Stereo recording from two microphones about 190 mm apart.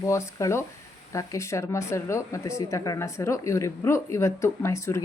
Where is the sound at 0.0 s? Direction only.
15° left (ahead or behind).